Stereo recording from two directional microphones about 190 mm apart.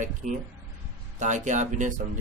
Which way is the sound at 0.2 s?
40° right (ahead or behind).